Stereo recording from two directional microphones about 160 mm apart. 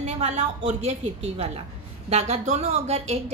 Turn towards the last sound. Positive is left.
turn(degrees=-40)  # may be behind; listen again after turning